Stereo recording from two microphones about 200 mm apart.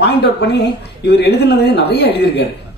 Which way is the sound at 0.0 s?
55° left (ahead or behind).